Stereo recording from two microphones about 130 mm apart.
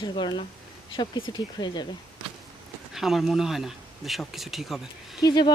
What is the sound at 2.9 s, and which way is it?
Speech, centre (ahead or behind).